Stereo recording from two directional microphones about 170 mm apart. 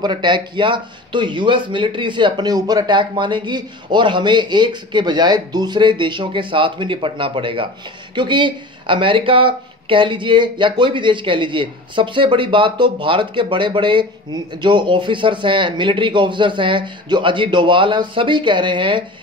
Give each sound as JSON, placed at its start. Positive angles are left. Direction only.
{"t": 0.0, "sound": "speech", "side_deg": -25}